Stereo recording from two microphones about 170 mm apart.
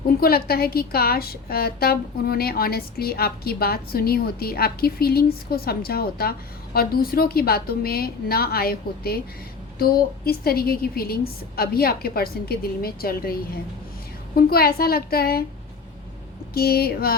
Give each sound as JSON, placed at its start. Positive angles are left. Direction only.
{"t": 0.2, "sound": "a woman's voice", "side_deg": 65}
{"t": 16.6, "sound": "a woman's voice", "side_deg": 65}